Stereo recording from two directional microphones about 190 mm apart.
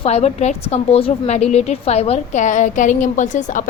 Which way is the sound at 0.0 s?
35° left (ahead or behind).